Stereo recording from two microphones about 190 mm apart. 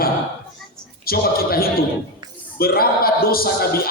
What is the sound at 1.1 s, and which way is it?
A man's voice, 50° left (ahead or behind).